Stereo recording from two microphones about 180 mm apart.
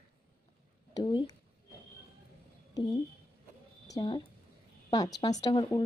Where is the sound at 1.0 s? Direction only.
25° left (ahead or behind).